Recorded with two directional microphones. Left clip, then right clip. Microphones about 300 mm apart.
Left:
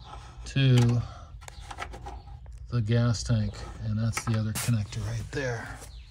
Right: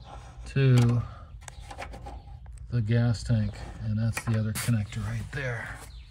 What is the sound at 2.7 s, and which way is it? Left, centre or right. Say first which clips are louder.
Speech: left 1 dB; left.